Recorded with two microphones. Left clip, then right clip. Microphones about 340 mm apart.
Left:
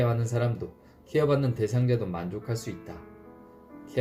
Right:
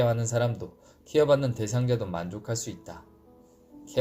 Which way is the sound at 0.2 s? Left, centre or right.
Right.